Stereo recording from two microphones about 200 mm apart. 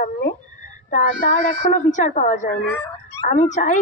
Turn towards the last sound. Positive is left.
turn(degrees=35)  # may be behind; listen again after turning